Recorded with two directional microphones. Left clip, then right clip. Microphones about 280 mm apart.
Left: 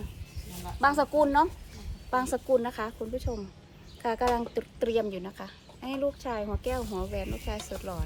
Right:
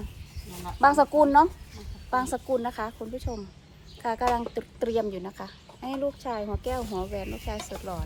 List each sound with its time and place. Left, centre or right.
0.8 s a woman's voice: centre
7.7 s speech: right